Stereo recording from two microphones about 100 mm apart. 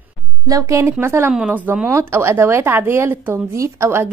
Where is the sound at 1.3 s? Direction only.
15° right (ahead or behind).